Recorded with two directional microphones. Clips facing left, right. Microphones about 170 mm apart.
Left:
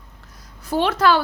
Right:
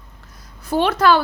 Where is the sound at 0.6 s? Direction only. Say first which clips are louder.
Right 2 dB; 55° right (ahead or behind).